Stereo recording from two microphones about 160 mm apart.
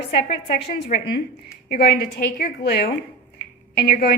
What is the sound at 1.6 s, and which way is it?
A woman's voice, 75° left (ahead or behind).